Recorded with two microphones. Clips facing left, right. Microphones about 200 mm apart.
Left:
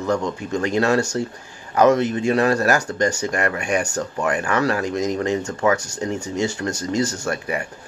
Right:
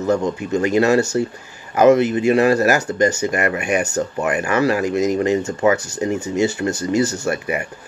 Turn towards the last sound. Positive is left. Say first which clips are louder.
# right 3 dB
turn(degrees=-5)  # may be behind; listen again after turning